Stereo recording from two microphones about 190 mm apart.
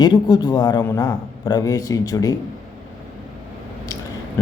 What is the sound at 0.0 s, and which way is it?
Speech, 20° left (ahead or behind).